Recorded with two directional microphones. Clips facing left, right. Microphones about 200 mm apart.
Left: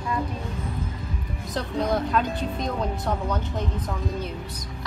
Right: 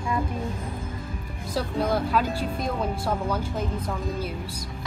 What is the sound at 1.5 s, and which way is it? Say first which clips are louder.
Speech: even; 5° right (ahead or behind).